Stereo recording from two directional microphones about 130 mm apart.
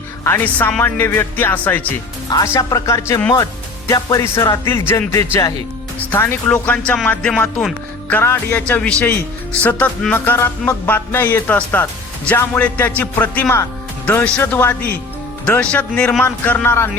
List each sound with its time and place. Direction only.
0.3 s speech: 15° left (ahead or behind)
2.3 s speech: 25° left (ahead or behind)